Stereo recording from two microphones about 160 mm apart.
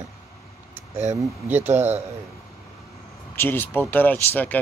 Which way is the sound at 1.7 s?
45° right (ahead or behind).